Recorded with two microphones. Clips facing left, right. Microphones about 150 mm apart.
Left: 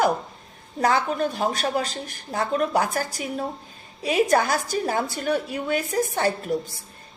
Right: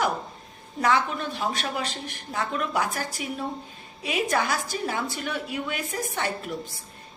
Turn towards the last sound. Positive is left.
turn(degrees=35)  # may be behind; listen again after turning